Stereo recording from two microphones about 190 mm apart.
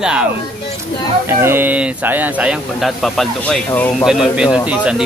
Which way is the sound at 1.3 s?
15° right (ahead or behind).